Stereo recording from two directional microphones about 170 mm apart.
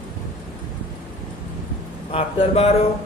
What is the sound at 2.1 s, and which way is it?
Speech, 35° left (ahead or behind).